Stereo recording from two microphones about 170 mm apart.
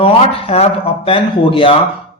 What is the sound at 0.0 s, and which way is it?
Speech, 35° left (ahead or behind).